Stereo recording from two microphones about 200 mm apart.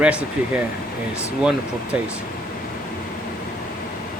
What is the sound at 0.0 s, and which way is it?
Speech, 5° right (ahead or behind).